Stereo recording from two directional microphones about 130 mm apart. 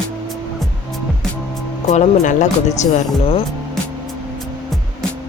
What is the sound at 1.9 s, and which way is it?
Speech, 65° left (ahead or behind).